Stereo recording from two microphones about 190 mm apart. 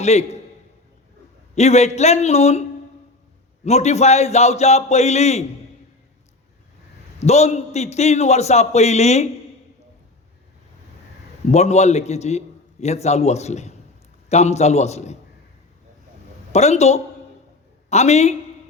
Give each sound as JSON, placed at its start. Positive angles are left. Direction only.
{"t": 0.0, "sound": "a man's voice", "side_deg": 35}
{"t": 1.5, "sound": "a man's voice", "side_deg": 35}
{"t": 7.2, "sound": "a man's voice", "side_deg": 35}
{"t": 11.5, "sound": "a man's voice", "side_deg": 35}
{"t": 16.5, "sound": "a man's voice", "side_deg": 35}